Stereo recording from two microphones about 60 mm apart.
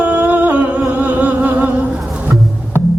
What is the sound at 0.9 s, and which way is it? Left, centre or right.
Music, right.